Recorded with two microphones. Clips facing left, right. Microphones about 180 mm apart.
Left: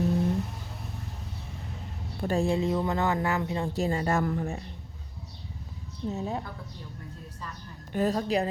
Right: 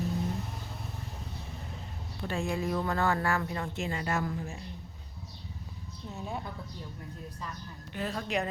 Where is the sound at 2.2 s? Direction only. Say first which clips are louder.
Left 7 dB; 40° left (ahead or behind).